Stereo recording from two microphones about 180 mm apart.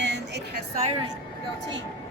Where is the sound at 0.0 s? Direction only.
75° right (ahead or behind).